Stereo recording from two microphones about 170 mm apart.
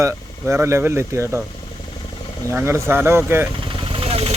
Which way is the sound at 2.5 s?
15° right (ahead or behind).